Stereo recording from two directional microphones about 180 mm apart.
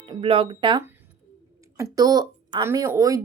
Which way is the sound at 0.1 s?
30° right (ahead or behind).